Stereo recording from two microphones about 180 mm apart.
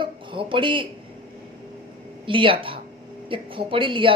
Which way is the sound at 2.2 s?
30° right (ahead or behind).